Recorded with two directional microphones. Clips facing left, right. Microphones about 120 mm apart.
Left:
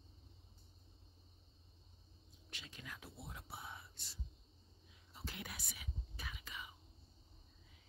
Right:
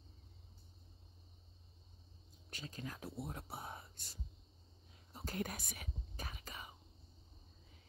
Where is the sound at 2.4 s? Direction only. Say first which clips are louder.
Right 6 dB; 40° right (ahead or behind).